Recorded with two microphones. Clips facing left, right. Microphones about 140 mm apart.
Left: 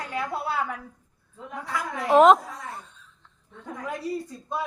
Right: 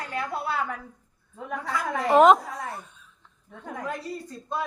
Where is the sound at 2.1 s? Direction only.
Centre (ahead or behind).